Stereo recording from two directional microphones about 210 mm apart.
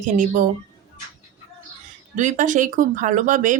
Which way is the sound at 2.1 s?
35° right (ahead or behind).